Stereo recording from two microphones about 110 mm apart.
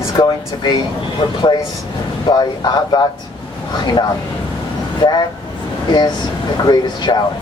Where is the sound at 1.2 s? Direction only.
50° left (ahead or behind).